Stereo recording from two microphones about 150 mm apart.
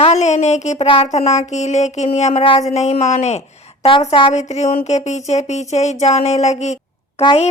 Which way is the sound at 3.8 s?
40° left (ahead or behind).